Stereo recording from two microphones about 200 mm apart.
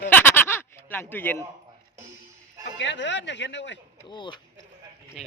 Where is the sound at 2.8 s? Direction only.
65° left (ahead or behind).